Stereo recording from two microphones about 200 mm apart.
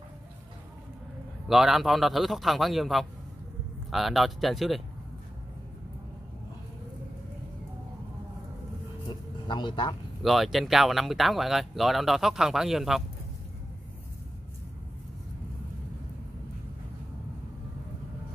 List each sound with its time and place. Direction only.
1.5 s speech: centre (ahead or behind)
9.5 s speech: 25° left (ahead or behind)
10.2 s speech: centre (ahead or behind)